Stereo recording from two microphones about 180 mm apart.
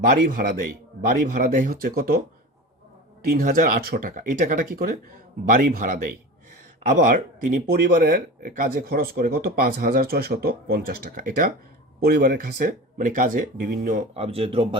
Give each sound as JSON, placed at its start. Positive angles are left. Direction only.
{"t": 0.1, "sound": "speech", "side_deg": -55}
{"t": 3.2, "sound": "speech", "side_deg": -50}
{"t": 14.1, "sound": "speech", "side_deg": -35}